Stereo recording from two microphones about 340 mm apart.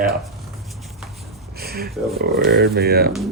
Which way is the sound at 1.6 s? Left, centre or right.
Right.